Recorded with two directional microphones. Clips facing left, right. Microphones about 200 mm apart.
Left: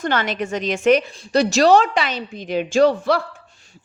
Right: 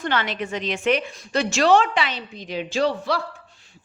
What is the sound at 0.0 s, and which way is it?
A woman's voice, 45° left (ahead or behind).